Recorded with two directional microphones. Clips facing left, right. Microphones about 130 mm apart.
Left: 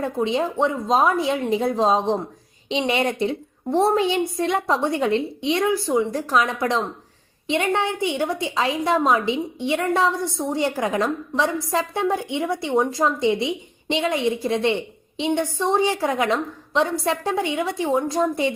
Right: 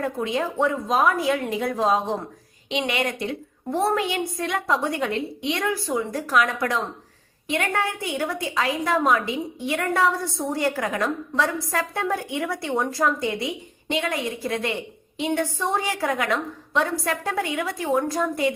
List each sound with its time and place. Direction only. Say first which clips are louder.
0.0 s a woman's voice: left 3 dB; 25° left (ahead or behind)